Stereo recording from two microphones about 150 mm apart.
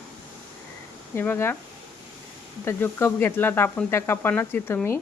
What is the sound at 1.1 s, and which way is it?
Speech, 15° left (ahead or behind).